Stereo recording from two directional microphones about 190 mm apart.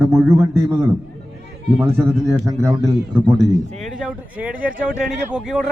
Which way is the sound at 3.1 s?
5° left (ahead or behind).